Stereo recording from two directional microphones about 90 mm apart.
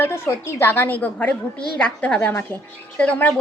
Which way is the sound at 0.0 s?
25° left (ahead or behind).